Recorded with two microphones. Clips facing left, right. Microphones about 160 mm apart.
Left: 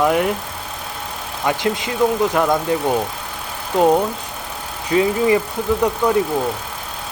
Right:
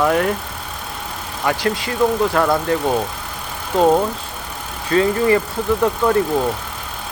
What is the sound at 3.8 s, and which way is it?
Speech, 15° left (ahead or behind).